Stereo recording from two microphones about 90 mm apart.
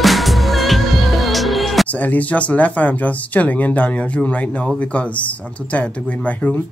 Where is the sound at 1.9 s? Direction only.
15° left (ahead or behind).